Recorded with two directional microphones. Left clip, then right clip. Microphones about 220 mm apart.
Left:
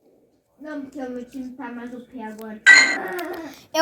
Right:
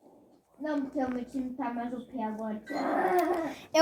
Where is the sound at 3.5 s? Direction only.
20° left (ahead or behind).